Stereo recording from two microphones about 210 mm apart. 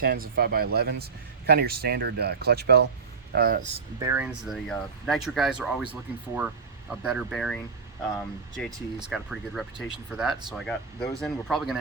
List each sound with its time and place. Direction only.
0.0 s speech: 45° right (ahead or behind)
4.0 s speech: 10° right (ahead or behind)
9.0 s speech: centre (ahead or behind)